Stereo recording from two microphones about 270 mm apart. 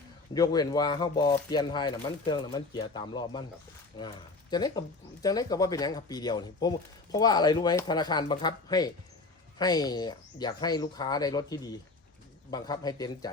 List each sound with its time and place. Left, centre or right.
0.3 s speech: centre
4.5 s speech: centre